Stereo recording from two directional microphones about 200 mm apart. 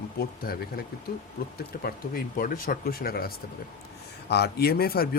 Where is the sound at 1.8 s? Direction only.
50° left (ahead or behind).